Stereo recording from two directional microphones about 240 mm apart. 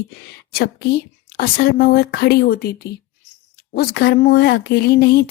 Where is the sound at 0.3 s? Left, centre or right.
Left.